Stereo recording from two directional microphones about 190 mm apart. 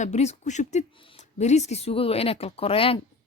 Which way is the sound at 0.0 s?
35° left (ahead or behind).